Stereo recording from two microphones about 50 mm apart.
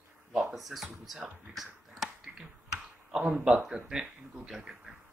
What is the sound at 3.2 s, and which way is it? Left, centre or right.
Speech, right.